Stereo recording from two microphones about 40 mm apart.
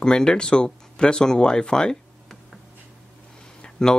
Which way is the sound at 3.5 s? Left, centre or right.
Centre.